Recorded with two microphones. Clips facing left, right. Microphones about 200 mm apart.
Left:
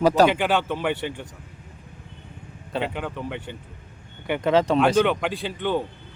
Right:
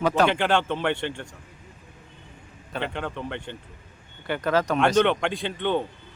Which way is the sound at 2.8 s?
5° left (ahead or behind).